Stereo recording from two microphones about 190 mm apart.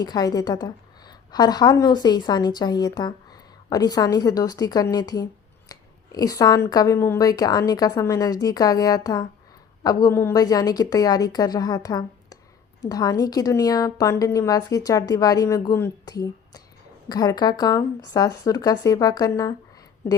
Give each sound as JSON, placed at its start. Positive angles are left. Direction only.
{"t": 0.0, "sound": "a woman's voice", "side_deg": 20}